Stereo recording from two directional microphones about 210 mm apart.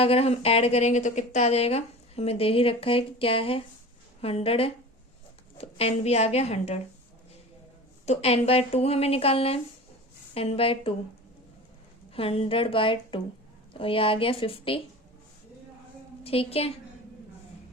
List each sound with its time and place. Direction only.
0.0 s a woman's voice: 30° left (ahead or behind)
8.0 s speech: 30° left (ahead or behind)
12.1 s speech: 25° left (ahead or behind)
16.2 s speech: 30° left (ahead or behind)